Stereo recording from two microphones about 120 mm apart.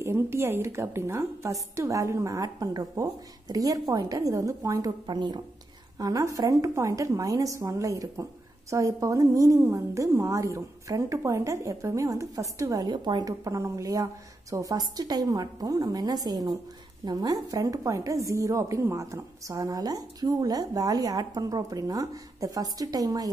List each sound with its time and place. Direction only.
0.0 s a woman's voice: 20° right (ahead or behind)
5.0 s a woman's voice: 40° right (ahead or behind)